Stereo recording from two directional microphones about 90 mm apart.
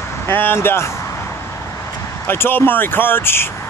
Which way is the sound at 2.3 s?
25° left (ahead or behind).